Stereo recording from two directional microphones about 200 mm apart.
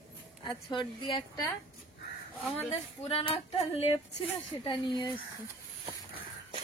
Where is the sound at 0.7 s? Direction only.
25° left (ahead or behind).